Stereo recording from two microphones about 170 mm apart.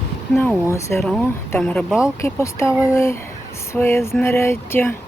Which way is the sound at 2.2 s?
15° left (ahead or behind).